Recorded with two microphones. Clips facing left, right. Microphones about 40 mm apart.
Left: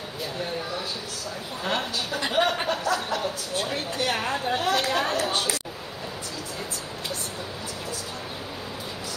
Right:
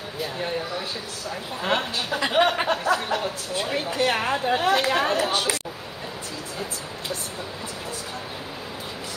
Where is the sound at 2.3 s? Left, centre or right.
Centre.